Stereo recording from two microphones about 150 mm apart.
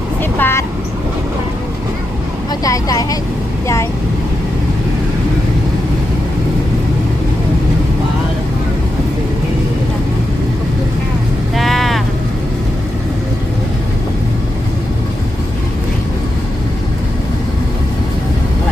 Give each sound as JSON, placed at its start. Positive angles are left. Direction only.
{"t": 0.3, "sound": "vehicle", "side_deg": 15}
{"t": 2.6, "sound": "speech", "side_deg": 25}
{"t": 11.5, "sound": "vehicle", "side_deg": 0}